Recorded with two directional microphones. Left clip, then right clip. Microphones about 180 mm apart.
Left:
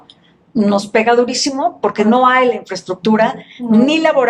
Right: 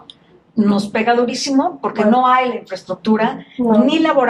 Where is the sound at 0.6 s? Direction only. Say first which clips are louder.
Left 4 dB; 35° left (ahead or behind).